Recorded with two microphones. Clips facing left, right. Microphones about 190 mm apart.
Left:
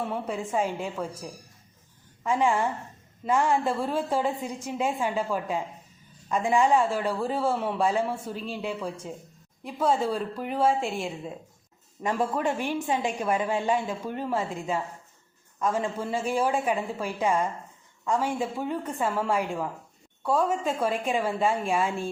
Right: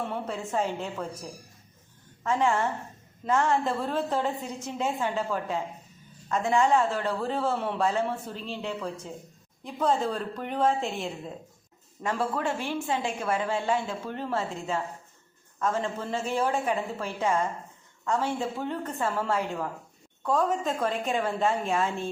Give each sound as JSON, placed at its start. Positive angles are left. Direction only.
{"t": 0.0, "sound": "a man's voice", "side_deg": 10}